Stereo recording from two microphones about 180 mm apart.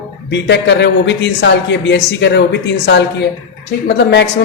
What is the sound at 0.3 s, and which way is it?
A man's voice, 80° left.